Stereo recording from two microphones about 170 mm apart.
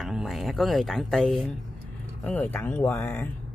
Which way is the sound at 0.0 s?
Centre (ahead or behind).